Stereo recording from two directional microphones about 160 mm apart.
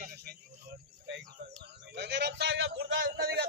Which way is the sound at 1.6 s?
90° right.